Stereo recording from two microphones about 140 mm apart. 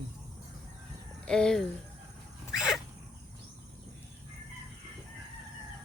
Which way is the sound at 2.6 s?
5° right (ahead or behind).